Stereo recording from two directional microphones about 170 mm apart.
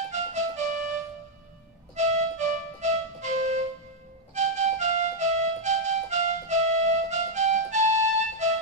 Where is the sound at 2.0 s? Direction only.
40° right (ahead or behind).